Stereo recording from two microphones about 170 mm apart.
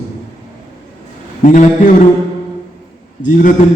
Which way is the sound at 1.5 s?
45° left (ahead or behind).